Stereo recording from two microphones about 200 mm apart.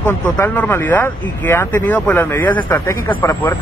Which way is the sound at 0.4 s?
10° left (ahead or behind).